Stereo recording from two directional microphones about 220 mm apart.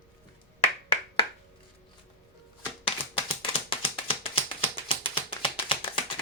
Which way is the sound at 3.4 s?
25° left (ahead or behind).